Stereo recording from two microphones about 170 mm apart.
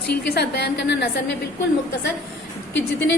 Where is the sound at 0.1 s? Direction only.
75° left (ahead or behind).